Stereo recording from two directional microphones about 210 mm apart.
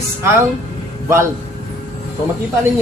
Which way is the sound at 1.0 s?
10° right (ahead or behind).